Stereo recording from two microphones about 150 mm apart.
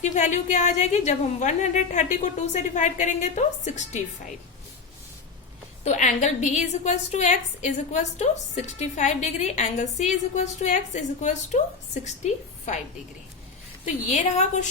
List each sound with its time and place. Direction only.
0.0 s a woman's voice: 55° left (ahead or behind)
5.8 s a woman's voice: 50° left (ahead or behind)
14.1 s a woman's voice: 50° left (ahead or behind)